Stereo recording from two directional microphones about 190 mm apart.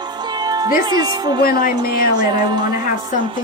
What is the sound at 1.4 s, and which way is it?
Speech, 50° left (ahead or behind).